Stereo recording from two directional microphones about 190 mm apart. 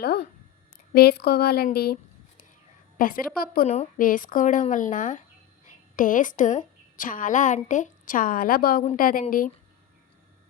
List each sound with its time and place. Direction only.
0.0 s a sound: 55° left (ahead or behind)
0.9 s speech: 55° left (ahead or behind)
3.0 s a woman's voice: 50° left (ahead or behind)
3.7 s a woman's voice: 40° left (ahead or behind)